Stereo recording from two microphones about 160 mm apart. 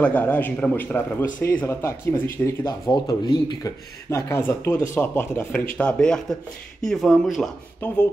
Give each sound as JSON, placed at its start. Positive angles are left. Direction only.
{"t": 0.0, "sound": "speech", "side_deg": 10}
{"t": 7.8, "sound": "speech", "side_deg": 10}